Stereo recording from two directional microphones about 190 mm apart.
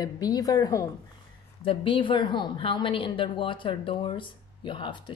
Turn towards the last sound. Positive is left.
turn(degrees=25)  # may be behind; listen again after turning